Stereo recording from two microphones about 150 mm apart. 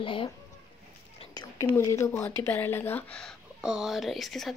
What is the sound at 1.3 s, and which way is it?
A woman's voice, 30° left (ahead or behind).